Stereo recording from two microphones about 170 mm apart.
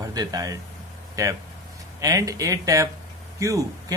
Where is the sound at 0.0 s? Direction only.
20° right (ahead or behind).